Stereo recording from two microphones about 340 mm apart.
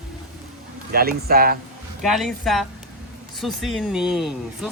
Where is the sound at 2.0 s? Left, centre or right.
Centre.